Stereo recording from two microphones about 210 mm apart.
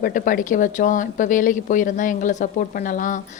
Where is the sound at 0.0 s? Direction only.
40° left (ahead or behind).